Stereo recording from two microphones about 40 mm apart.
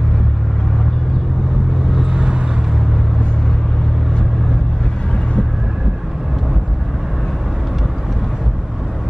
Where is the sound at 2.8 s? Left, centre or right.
Centre.